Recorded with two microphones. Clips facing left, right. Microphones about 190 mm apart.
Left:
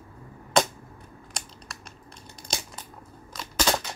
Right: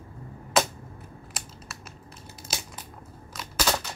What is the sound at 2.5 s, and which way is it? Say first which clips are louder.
Coin: left 2 dB; 5° right (ahead or behind).